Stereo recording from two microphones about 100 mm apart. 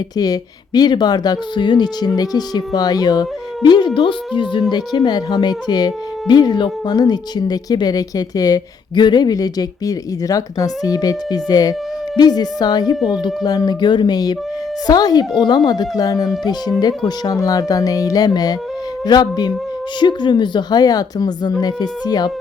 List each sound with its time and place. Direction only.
0.2 s speech: 40° left (ahead or behind)
4.7 s speech: 45° left (ahead or behind)